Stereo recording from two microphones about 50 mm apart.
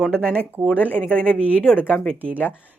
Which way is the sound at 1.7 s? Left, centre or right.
Left.